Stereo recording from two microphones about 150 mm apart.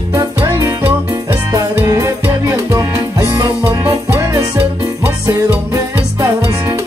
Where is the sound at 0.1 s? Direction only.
15° right (ahead or behind).